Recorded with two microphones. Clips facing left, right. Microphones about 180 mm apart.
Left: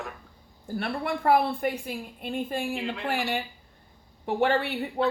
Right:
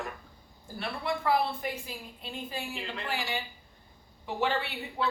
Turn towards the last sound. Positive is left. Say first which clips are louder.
# left 6 dB
turn(degrees=55)  # may be behind; listen again after turning